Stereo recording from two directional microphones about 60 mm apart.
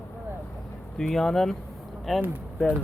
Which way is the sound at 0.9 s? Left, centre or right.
Centre.